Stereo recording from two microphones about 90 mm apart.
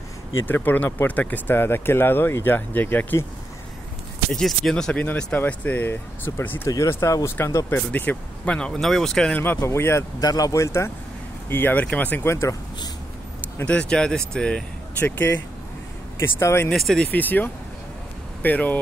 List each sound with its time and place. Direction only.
0.5 s speech: 20° left (ahead or behind)
4.3 s speech: 5° left (ahead or behind)
9.3 s speech: 20° left (ahead or behind)
10.2 s speech: 45° left (ahead or behind)
11.4 s speech: 20° left (ahead or behind)
12.2 s speech: 30° left (ahead or behind)
13.7 s speech: 10° left (ahead or behind)
15.0 s speech: 25° left (ahead or behind)
16.7 s speech: 5° left (ahead or behind)
17.1 s speech: 20° left (ahead or behind)